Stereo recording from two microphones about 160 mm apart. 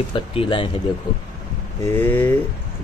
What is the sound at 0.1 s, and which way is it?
Speech, 35° left (ahead or behind).